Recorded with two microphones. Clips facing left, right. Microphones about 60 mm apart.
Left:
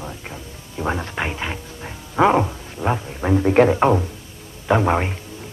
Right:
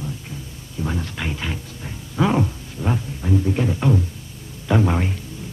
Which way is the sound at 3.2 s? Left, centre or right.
Left.